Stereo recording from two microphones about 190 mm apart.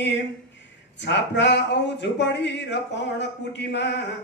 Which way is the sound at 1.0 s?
65° left (ahead or behind).